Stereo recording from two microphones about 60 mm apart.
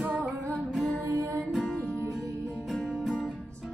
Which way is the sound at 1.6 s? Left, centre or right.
Centre.